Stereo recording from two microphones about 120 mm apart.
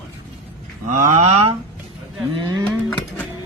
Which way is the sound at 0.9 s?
90° right.